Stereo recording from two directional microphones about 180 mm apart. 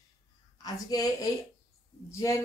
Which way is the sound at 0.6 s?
20° left (ahead or behind).